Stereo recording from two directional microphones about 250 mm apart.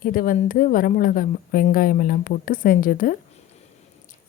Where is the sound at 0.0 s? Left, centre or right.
Left.